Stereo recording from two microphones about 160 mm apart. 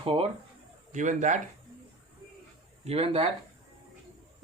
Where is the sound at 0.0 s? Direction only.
35° right (ahead or behind).